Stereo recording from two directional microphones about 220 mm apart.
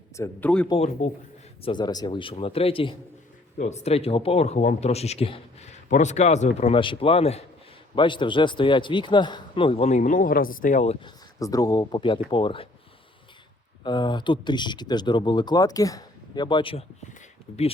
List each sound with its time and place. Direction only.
0.2 s speech: 10° left (ahead or behind)
0.7 s speech: 30° left (ahead or behind)
11.0 s speech: 15° left (ahead or behind)
13.8 s speech: 20° left (ahead or behind)